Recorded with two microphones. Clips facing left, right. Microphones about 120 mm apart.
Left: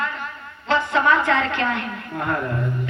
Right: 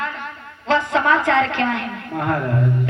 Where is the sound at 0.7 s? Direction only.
90° right; by 2.4 s 70° right (ahead or behind).